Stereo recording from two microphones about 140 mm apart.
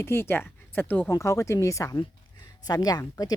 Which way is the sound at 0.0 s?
15° left (ahead or behind).